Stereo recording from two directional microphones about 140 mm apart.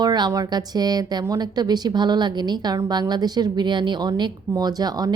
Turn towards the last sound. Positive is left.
turn(degrees=-30)  # may be behind; listen again after turning